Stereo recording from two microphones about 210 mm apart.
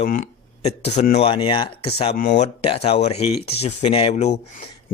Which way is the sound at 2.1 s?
40° left (ahead or behind).